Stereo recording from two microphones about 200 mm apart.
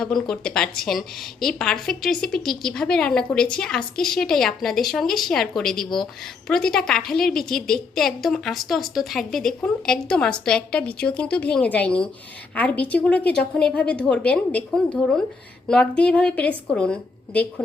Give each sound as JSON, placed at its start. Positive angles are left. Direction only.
{"t": 0.0, "sound": "a woman's voice", "side_deg": 5}